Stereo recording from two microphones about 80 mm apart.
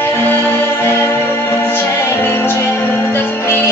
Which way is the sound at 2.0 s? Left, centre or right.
Left.